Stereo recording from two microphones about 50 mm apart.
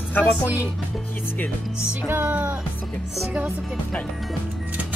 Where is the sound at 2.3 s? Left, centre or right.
Right.